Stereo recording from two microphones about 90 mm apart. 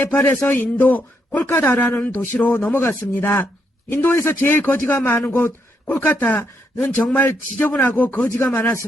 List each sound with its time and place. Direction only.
0.4 s a man's voice: 20° left (ahead or behind)